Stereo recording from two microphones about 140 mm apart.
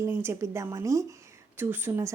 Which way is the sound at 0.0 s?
15° right (ahead or behind).